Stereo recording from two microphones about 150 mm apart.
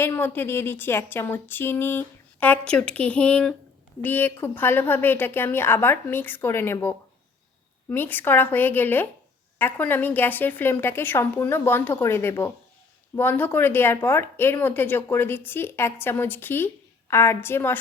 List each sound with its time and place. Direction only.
0.0 s speech: 15° left (ahead or behind)